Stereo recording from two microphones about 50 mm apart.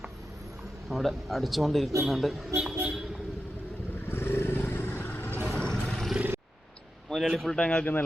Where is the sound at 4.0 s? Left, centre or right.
Left.